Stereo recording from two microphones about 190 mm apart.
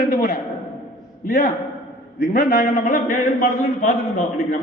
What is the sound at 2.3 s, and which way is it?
Speech, 50° left (ahead or behind).